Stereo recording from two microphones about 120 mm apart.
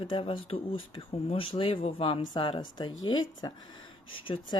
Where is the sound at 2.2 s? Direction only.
40° left (ahead or behind).